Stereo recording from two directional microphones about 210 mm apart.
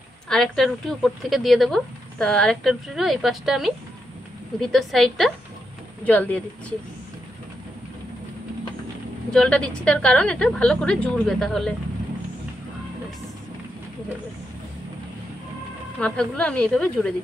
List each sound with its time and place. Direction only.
0.3 s speech: centre (ahead or behind)
9.3 s speech: 5° left (ahead or behind)
16.0 s speech: 5° left (ahead or behind)